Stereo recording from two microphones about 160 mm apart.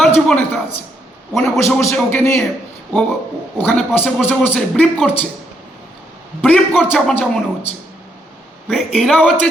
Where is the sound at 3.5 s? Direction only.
10° left (ahead or behind).